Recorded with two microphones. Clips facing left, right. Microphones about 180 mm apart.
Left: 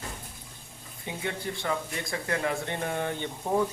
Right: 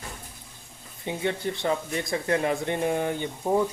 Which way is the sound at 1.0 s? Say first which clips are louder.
Right 6 dB; 25° right (ahead or behind).